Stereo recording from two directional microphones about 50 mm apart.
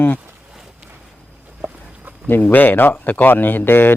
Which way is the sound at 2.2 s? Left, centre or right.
Left.